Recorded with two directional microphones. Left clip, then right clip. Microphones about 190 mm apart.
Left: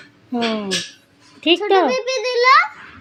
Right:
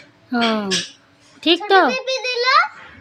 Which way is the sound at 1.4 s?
25° right (ahead or behind).